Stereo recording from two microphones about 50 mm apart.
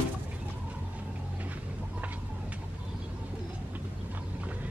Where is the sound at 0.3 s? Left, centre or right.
Right.